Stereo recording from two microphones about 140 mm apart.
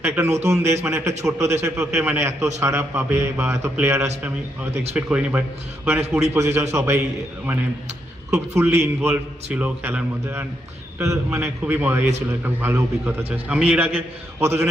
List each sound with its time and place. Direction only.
0.0 s a man's voice: 15° right (ahead or behind)
8.3 s a man's voice: 20° right (ahead or behind)